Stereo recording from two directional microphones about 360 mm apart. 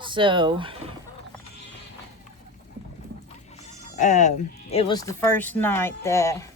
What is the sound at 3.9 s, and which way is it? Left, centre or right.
Speech, left.